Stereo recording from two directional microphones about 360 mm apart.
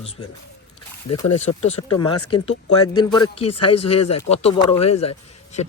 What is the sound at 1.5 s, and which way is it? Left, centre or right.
Speech, left.